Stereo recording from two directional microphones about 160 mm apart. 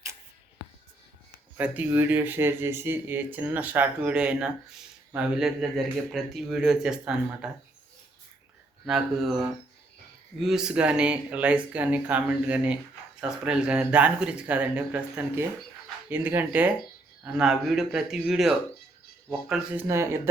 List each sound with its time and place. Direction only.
1.5 s speech: 10° right (ahead or behind)
8.9 s speech: centre (ahead or behind)
19.9 s speech: 15° right (ahead or behind)